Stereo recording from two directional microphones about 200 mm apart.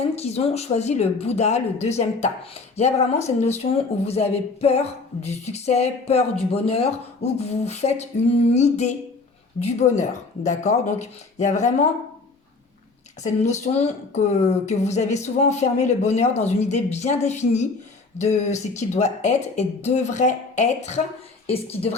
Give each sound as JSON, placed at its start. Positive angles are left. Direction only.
{"t": 0.0, "sound": "speech", "side_deg": 30}
{"t": 13.2, "sound": "a woman's voice", "side_deg": 35}